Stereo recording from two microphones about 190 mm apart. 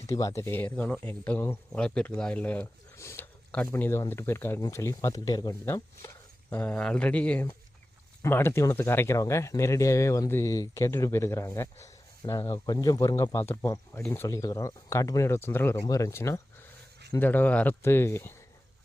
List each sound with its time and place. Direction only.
0.1 s speech: 15° left (ahead or behind)